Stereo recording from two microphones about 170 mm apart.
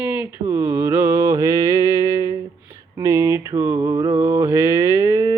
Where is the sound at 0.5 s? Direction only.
15° right (ahead or behind).